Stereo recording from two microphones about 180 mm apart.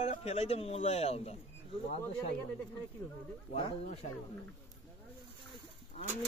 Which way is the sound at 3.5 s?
40° left (ahead or behind).